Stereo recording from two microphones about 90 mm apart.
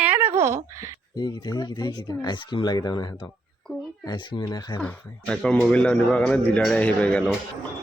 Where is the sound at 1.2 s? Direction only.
50° left (ahead or behind).